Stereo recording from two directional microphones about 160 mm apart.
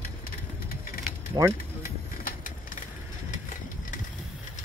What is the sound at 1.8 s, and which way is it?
Music, 65° left (ahead or behind).